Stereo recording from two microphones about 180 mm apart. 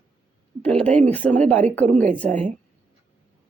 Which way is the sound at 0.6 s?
5° left (ahead or behind).